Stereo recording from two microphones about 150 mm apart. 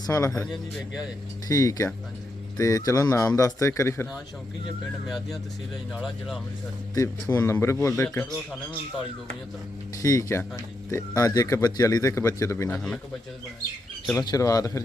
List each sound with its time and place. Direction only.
0.0 s a man's voice: 20° left (ahead or behind)
1.5 s a man's voice: 25° left (ahead or behind)
5.9 s speech: centre (ahead or behind)
6.9 s a man's voice: 25° left (ahead or behind)
10.0 s a man's voice: 20° left (ahead or behind)
12.7 s speech: 5° left (ahead or behind)
14.2 s a man's voice: 25° left (ahead or behind)